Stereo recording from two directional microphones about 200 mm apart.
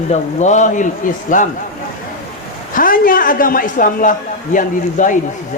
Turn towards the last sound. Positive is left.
turn(degrees=40)  # may be behind; listen again after turning